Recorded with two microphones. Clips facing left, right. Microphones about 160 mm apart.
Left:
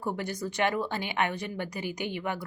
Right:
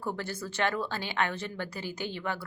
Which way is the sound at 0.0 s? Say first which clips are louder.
Left 3 dB; 15° left (ahead or behind).